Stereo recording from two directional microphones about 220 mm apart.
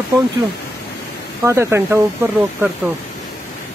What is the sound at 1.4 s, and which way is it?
Speech, 10° right (ahead or behind).